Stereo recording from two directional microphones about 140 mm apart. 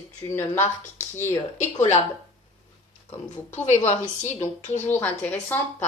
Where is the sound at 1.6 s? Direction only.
55° left (ahead or behind).